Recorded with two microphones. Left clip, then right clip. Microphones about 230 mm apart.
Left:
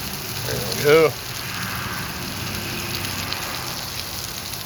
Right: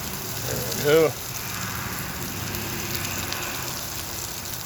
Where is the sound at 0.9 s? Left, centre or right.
Left.